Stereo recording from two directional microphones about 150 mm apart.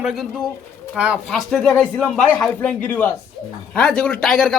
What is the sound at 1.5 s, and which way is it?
A man's voice, 5° left (ahead or behind).